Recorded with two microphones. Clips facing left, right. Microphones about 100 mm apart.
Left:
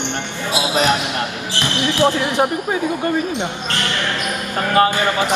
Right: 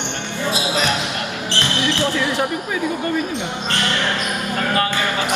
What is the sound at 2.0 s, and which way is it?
Speech, 20° left (ahead or behind).